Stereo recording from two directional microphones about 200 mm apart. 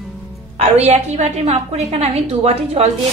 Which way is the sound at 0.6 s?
35° right (ahead or behind).